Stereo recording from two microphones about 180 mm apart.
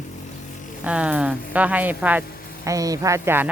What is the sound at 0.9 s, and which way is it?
Speech, 5° right (ahead or behind).